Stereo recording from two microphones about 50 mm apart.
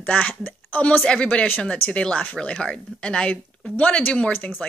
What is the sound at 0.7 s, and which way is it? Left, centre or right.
A woman's voice, left.